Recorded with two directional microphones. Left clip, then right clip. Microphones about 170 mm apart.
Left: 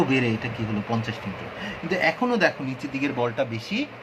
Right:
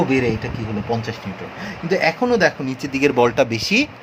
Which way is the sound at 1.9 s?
40° right (ahead or behind).